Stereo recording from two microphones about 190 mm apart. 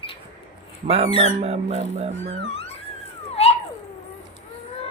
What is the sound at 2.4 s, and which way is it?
Music, 30° left (ahead or behind).